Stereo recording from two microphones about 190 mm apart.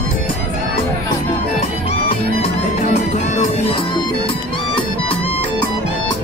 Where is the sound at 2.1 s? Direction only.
35° left (ahead or behind).